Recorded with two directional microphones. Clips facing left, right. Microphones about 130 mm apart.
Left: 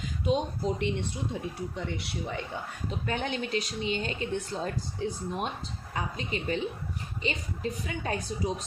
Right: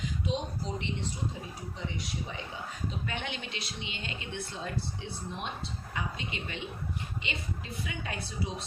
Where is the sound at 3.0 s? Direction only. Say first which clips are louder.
Left 6 dB; 40° left (ahead or behind).